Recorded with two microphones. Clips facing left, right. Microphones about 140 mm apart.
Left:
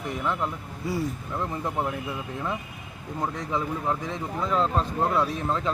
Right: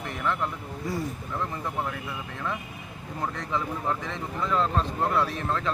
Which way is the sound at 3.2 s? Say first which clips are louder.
Left 2 dB; 10° left (ahead or behind).